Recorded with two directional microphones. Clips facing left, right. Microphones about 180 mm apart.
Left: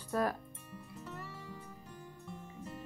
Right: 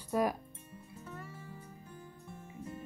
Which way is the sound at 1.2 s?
80° left.